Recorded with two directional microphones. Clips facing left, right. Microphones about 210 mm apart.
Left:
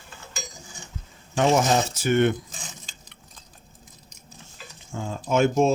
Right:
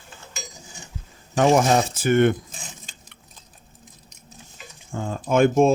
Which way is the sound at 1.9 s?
50° right (ahead or behind).